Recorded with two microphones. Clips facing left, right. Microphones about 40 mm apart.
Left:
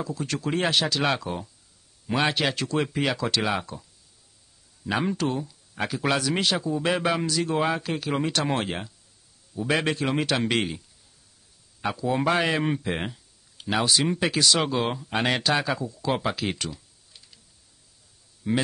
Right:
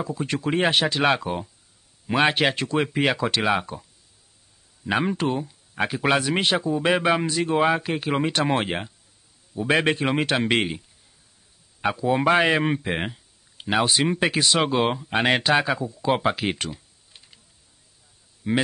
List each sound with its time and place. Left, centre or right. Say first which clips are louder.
0.0 s speech: right 3 dB; right
4.8 s speech: right 3 dB; right
12.0 s speech: right 4 dB; right
16.5 s computer keyboard: right 2 dB; right
18.4 s speech: right 2 dB; right